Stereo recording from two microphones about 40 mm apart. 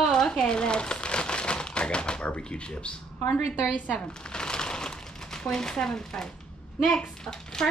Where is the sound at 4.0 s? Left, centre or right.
Left.